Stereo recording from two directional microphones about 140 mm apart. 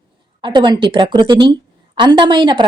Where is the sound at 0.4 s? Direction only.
35° right (ahead or behind).